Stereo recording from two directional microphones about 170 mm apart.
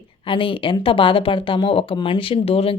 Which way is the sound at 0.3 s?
30° left (ahead or behind).